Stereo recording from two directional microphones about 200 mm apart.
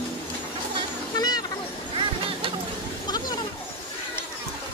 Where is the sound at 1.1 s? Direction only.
20° left (ahead or behind).